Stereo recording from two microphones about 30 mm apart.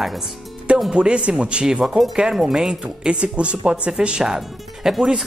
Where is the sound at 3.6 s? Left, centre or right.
Right.